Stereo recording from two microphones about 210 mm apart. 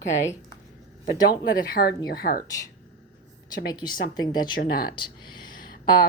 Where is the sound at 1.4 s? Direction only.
45° left (ahead or behind).